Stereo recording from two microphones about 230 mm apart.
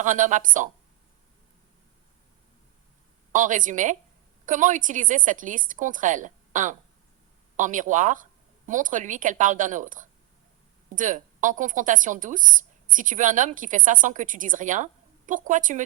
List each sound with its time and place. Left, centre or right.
0.0 s speech: right
3.3 s speech: right